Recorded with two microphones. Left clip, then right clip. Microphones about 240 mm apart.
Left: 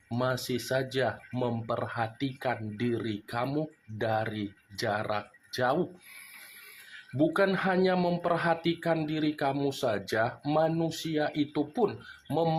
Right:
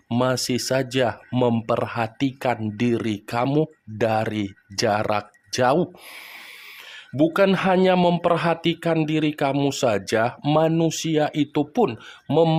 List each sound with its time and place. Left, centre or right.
0.1 s speech: right
7.2 s speech: right